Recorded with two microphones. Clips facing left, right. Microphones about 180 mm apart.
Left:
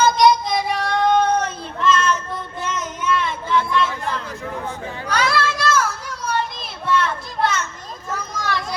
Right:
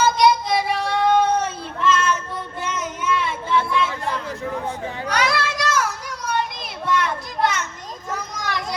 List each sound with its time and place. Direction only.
0.0 s child singing: 10° right (ahead or behind)
2.6 s a sound: 10° right (ahead or behind)
4.3 s children playing: 20° right (ahead or behind)